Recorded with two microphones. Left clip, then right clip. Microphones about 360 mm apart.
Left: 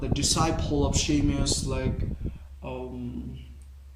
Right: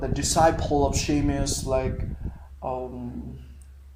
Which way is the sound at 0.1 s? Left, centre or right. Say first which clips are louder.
Right 6 dB; centre.